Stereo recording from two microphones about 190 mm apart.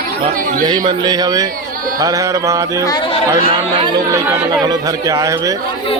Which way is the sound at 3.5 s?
25° right (ahead or behind).